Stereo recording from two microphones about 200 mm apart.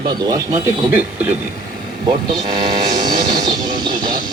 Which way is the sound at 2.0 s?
20° right (ahead or behind).